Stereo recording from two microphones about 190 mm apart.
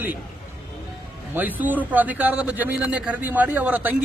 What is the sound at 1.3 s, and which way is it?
A man's voice, 10° right (ahead or behind).